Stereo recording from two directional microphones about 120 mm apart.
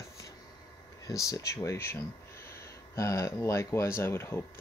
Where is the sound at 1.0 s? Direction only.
30° left (ahead or behind).